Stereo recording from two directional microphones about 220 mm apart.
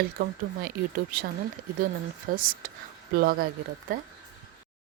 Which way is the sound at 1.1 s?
40° right (ahead or behind).